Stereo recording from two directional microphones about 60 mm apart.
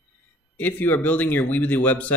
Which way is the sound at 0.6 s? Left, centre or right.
Left.